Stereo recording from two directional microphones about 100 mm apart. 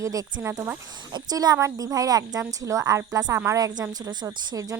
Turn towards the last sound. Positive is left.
turn(degrees=-35)  # may be behind; listen again after turning